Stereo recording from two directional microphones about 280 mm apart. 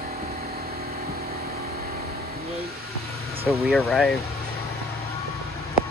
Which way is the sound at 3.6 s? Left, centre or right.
Centre.